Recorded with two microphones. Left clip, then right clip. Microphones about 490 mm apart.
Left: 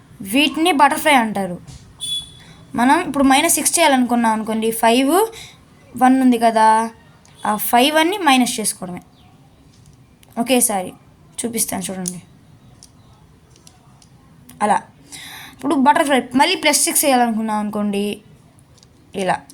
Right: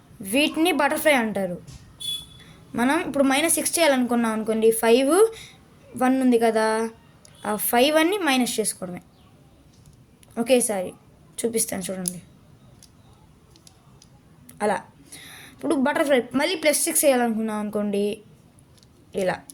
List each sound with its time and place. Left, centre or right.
0.2 s a woman's voice: right
10.3 s a woman's voice: right
14.4 s a woman's voice: right